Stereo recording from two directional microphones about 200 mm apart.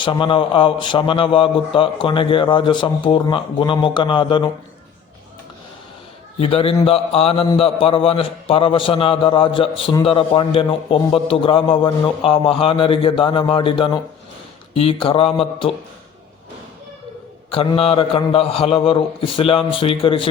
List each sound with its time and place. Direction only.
0.0 s a man's voice: 25° left (ahead or behind)
6.4 s a man's voice: 30° left (ahead or behind)
17.5 s a man's voice: 30° left (ahead or behind)